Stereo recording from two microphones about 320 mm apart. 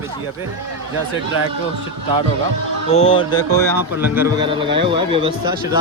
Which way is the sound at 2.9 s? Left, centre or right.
Centre.